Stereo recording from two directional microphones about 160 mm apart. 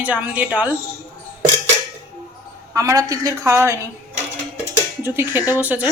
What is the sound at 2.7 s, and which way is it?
A woman's voice, 20° right (ahead or behind).